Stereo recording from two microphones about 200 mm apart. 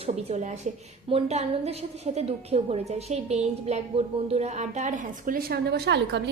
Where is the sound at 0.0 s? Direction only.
35° right (ahead or behind).